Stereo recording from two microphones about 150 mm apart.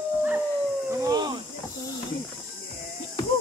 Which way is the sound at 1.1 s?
25° right (ahead or behind).